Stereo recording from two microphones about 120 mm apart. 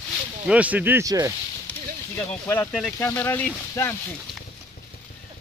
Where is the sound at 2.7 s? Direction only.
5° left (ahead or behind).